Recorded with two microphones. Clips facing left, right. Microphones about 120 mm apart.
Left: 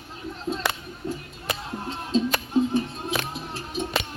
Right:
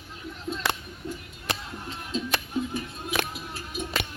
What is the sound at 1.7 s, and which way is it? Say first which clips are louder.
Music: left 7 dB; 35° left (ahead or behind).